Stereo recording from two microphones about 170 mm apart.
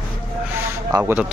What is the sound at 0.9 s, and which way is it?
Speech, 15° right (ahead or behind).